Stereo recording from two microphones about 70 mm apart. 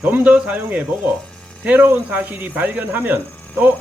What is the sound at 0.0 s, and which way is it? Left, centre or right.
Speech, right.